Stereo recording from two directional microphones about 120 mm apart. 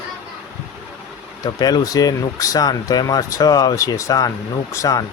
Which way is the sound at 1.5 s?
35° left (ahead or behind).